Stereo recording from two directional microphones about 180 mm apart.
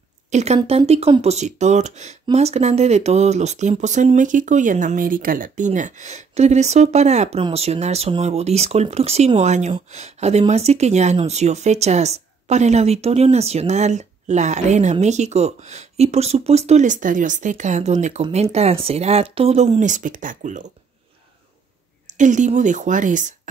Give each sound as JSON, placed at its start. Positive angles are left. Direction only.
{"t": 0.3, "sound": "a woman's voice", "side_deg": -40}
{"t": 22.1, "sound": "a woman's voice", "side_deg": -45}